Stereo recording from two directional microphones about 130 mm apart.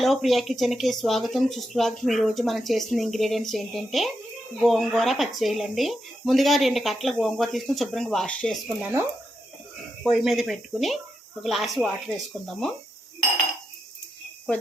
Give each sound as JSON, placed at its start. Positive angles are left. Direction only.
{"t": 0.0, "sound": "speech", "side_deg": 0}
{"t": 8.8, "sound": "speech", "side_deg": -15}
{"t": 10.0, "sound": "speech", "side_deg": 0}